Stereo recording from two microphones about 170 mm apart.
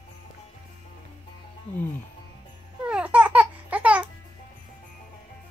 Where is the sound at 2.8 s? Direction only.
5° right (ahead or behind).